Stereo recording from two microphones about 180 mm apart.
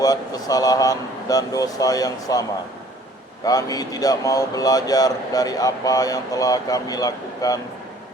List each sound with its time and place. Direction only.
0.0 s speech: 20° left (ahead or behind)
3.4 s speech: 20° left (ahead or behind)